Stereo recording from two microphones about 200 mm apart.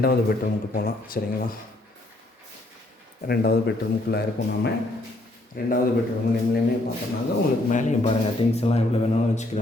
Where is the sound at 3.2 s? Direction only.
50° left (ahead or behind).